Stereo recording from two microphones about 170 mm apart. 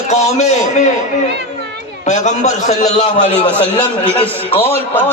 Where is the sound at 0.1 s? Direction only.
40° left (ahead or behind).